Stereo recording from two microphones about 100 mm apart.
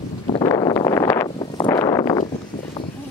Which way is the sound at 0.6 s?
40° left (ahead or behind).